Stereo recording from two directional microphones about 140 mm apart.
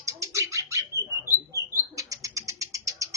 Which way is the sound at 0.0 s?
20° right (ahead or behind).